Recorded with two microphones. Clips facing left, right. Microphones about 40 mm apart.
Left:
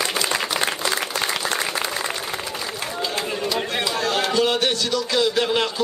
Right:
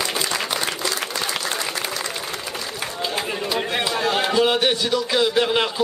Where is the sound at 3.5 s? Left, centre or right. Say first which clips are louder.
Right 3 dB; centre.